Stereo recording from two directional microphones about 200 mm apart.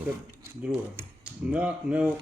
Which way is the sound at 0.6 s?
10° right (ahead or behind).